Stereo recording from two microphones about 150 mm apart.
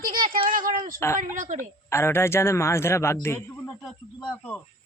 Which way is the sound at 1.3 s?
60° right (ahead or behind).